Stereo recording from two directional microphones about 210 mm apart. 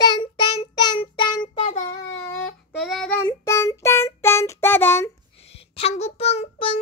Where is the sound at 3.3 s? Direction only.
15° left (ahead or behind).